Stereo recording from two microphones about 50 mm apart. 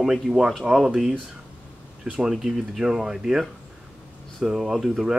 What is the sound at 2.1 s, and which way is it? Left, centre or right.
Speech, centre.